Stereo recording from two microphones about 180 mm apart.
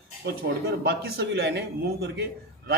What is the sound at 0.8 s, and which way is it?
A man's voice, 60° right (ahead or behind).